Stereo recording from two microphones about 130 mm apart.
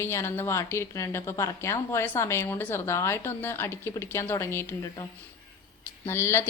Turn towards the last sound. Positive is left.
turn(degrees=20)  # may be behind; listen again after turning